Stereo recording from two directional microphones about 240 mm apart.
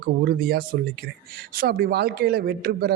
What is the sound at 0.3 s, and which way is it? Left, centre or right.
Speech, right.